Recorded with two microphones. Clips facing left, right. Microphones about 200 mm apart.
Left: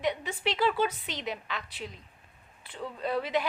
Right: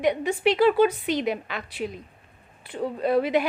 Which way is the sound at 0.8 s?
10° right (ahead or behind).